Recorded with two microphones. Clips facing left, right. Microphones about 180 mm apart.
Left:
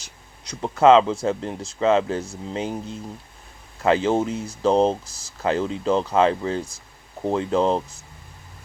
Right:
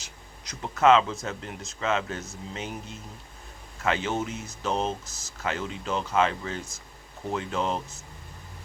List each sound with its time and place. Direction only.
0.4 s speech: 30° left (ahead or behind)